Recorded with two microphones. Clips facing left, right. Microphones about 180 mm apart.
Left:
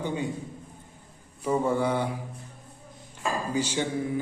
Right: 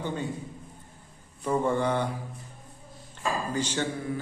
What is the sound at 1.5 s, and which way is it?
Speech, 5° left (ahead or behind).